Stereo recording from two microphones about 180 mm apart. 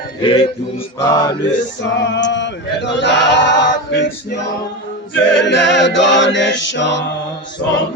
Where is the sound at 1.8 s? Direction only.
85° left.